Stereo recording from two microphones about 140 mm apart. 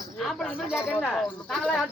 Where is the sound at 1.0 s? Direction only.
5° left (ahead or behind).